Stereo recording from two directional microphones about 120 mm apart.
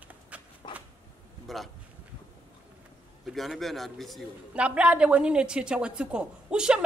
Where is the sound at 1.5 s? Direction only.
Centre (ahead or behind).